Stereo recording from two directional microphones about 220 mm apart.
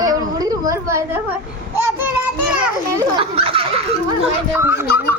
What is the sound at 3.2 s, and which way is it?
Speech, 25° right (ahead or behind).